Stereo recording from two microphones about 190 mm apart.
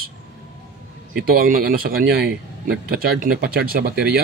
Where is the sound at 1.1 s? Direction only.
50° right (ahead or behind).